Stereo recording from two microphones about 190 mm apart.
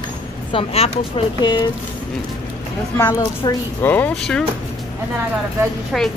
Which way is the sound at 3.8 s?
10° left (ahead or behind).